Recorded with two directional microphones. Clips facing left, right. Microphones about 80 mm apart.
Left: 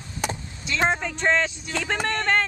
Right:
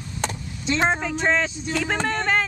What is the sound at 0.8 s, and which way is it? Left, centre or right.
Speech, centre.